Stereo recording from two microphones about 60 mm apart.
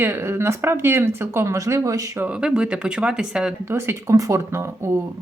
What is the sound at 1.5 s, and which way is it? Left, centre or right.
Speech, right.